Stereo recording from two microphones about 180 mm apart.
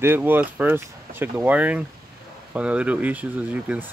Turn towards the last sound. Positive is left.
turn(degrees=-10)  # may be behind; listen again after turning